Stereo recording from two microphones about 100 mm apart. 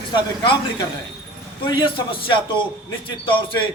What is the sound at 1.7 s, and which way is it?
Speech, 55° left (ahead or behind).